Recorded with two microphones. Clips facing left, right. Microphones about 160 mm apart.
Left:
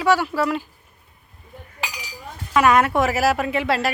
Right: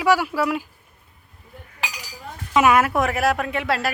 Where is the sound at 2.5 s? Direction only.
15° right (ahead or behind).